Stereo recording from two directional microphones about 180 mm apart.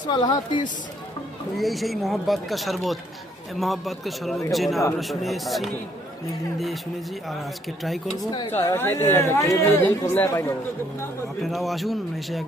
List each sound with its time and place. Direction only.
0.1 s speech: 25° left (ahead or behind)
1.5 s speech: centre (ahead or behind)
7.9 s speech: centre (ahead or behind)
8.3 s speech: 25° left (ahead or behind)
8.5 s speech: 15° left (ahead or behind)
11.4 s speech: centre (ahead or behind)